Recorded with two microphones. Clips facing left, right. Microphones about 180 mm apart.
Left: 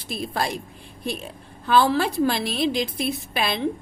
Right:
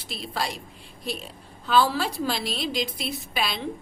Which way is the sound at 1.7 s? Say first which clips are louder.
Left 3 dB; 55° left (ahead or behind).